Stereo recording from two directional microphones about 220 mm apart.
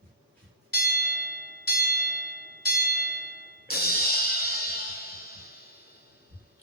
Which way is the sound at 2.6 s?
45° left (ahead or behind).